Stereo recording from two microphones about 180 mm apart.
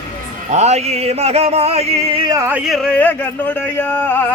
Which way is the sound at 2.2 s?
15° right (ahead or behind).